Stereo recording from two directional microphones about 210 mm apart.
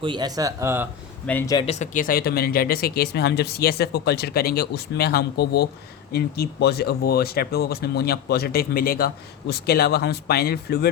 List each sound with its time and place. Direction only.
0.0 s speech: 20° right (ahead or behind)
1.3 s speech: 10° left (ahead or behind)
1.5 s speech: 30° left (ahead or behind); by 10.8 s 50° left (ahead or behind)